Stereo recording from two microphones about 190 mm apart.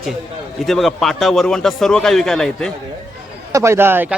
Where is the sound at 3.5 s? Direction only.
15° right (ahead or behind).